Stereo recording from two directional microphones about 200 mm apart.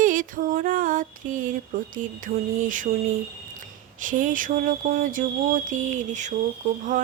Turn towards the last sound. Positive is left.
turn(degrees=-40)  # may be behind; listen again after turning